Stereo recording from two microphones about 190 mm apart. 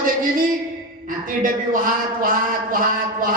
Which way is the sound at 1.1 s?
45° right (ahead or behind).